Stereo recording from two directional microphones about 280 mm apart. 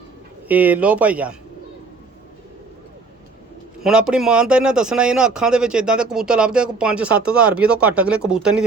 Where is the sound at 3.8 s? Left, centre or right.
Centre.